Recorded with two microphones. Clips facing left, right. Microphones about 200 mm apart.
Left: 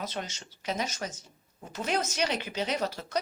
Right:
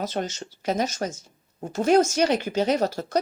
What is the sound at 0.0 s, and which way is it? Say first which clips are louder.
Speech: right 8 dB; 45° right (ahead or behind).